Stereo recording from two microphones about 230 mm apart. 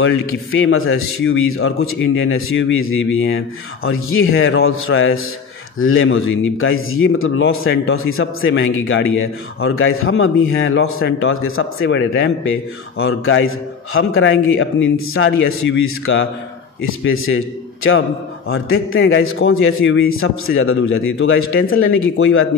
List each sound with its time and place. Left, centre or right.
0.0 s speech: left
18.5 s speech: left